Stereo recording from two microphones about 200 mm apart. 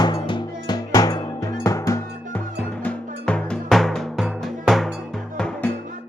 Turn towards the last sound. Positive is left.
turn(degrees=5)  # may be behind; listen again after turning